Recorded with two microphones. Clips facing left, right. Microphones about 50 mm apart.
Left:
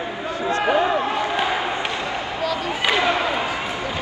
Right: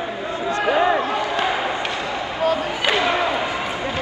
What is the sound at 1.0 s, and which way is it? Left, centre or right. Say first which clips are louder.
Basketball bounce: even; left.